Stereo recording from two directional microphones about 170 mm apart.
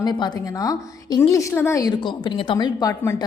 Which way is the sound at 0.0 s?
25° left (ahead or behind).